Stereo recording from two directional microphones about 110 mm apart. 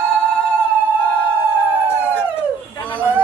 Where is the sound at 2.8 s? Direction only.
15° left (ahead or behind).